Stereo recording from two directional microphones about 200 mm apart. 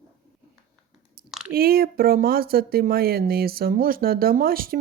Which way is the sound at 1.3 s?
5° right (ahead or behind).